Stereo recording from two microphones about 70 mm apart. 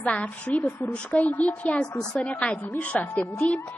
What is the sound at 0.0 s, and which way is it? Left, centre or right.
A child's voice, centre.